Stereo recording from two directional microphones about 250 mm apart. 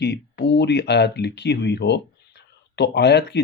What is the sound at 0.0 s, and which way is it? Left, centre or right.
Speech, left.